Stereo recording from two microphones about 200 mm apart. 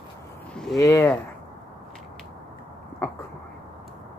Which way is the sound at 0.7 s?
15° left (ahead or behind).